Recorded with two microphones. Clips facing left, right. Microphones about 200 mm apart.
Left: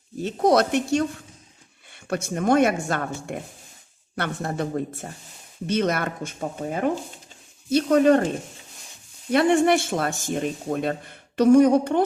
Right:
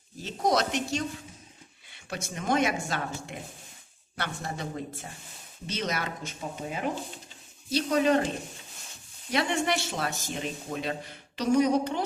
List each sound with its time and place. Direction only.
0.2 s speech: 60° left (ahead or behind)
9.3 s speech: 55° left (ahead or behind)